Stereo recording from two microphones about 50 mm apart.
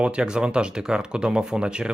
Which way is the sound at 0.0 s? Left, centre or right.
Centre.